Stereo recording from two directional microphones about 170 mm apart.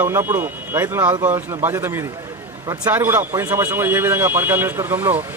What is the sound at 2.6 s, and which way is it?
Speech, 15° right (ahead or behind).